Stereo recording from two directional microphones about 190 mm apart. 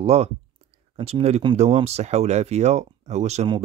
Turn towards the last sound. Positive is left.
turn(degrees=-30)  # may be behind; listen again after turning